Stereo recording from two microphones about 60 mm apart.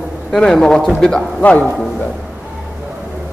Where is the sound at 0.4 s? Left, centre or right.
Centre.